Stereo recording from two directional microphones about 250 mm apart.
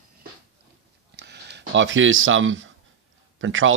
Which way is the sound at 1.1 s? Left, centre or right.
Right.